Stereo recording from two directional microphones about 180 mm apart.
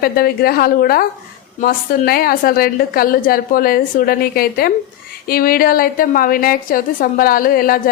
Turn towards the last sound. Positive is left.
turn(degrees=55)  # may be behind; listen again after turning